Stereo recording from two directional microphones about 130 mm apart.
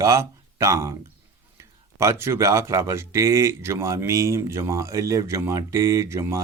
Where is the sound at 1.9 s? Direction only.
20° right (ahead or behind).